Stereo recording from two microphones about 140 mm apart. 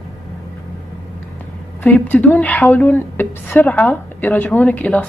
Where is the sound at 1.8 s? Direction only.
10° left (ahead or behind).